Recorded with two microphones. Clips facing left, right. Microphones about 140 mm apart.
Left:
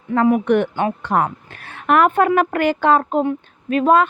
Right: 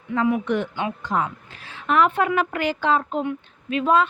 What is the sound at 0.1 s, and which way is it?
A woman's voice, 50° left (ahead or behind).